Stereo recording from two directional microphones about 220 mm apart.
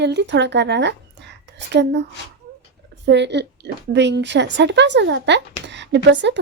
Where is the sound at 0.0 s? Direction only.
50° right (ahead or behind).